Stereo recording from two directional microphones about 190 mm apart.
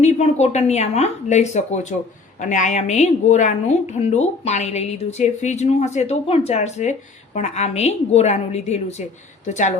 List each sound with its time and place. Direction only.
0.0 s a woman's voice: 35° left (ahead or behind)